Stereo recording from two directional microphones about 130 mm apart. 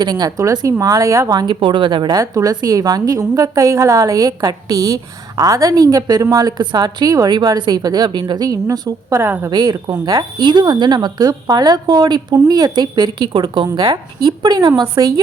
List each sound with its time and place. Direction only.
0.0 s speech: 30° right (ahead or behind)
9.5 s speech: 35° right (ahead or behind)